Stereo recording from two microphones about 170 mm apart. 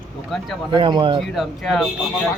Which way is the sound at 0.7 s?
30° right (ahead or behind).